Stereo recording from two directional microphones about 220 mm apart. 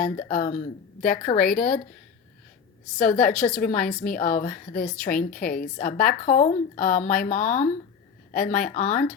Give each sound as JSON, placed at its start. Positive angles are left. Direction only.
{"t": 0.0, "sound": "a woman's voice", "side_deg": 35}
{"t": 3.0, "sound": "a woman's voice", "side_deg": 35}